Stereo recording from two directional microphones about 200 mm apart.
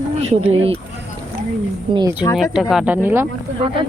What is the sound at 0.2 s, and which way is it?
Speech, 30° right (ahead or behind).